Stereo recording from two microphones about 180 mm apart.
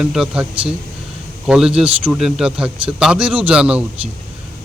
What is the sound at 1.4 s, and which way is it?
Speech, 5° right (ahead or behind).